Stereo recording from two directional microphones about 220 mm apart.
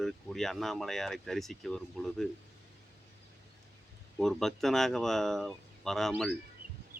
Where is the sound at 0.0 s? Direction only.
Centre (ahead or behind).